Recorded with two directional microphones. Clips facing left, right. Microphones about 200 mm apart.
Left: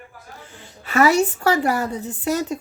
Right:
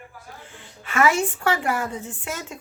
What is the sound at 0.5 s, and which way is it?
A woman's voice, 40° left (ahead or behind).